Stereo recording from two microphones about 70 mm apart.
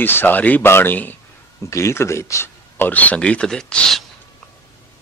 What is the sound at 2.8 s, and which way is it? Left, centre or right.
Speech, left.